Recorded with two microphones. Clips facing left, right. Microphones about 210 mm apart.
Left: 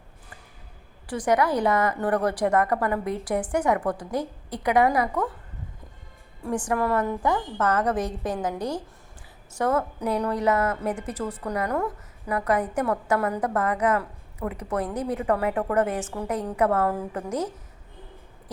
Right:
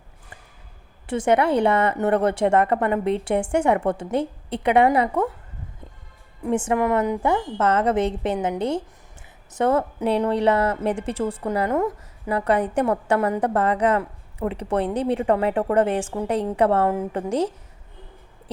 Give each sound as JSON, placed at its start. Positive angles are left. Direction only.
{"t": 1.0, "sound": "a woman's voice", "side_deg": -25}
{"t": 6.4, "sound": "a woman's voice", "side_deg": -25}